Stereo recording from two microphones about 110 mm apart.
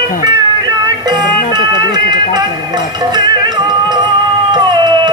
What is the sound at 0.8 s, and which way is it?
Music, 40° right (ahead or behind).